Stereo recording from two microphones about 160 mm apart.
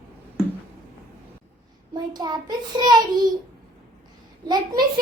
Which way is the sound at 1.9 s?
25° right (ahead or behind).